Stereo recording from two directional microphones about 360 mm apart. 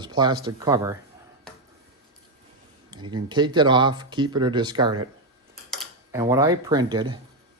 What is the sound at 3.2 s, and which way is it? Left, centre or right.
Speech, centre.